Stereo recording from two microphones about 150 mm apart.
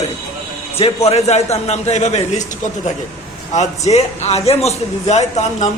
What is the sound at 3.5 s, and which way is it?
A man's voice, 50° left (ahead or behind).